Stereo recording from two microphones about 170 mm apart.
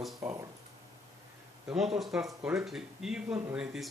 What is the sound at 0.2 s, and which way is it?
Speech, 15° right (ahead or behind).